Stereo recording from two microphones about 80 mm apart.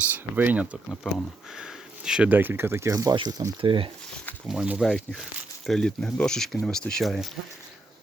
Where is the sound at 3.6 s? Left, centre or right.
Right.